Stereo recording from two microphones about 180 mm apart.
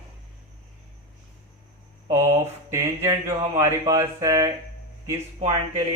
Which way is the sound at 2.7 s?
15° right (ahead or behind).